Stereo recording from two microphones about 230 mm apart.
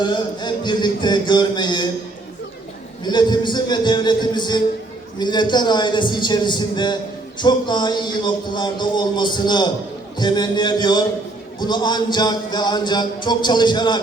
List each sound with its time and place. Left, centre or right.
0.0 s a man's voice: centre
3.0 s a man's voice: centre